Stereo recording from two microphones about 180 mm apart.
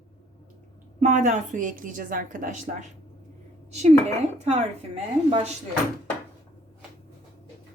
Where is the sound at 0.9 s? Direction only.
45° right (ahead or behind).